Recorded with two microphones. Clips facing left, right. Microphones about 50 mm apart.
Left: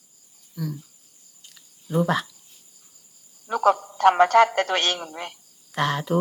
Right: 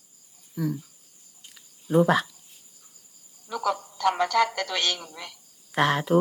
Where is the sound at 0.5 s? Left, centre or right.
Centre.